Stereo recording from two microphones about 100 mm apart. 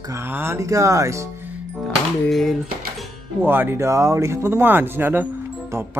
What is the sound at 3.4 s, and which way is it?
Speech, 20° right (ahead or behind).